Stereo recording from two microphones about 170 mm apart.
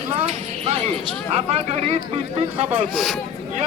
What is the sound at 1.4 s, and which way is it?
Speech, 40° right (ahead or behind).